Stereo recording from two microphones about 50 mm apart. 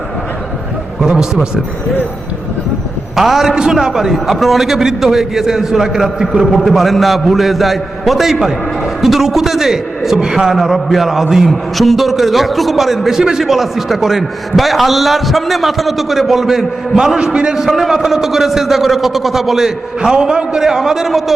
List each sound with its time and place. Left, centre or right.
1.0 s a man's voice: centre
3.2 s a man's voice: centre